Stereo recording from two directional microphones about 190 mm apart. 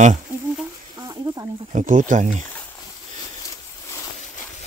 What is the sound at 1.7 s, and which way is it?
Speech, 40° right (ahead or behind).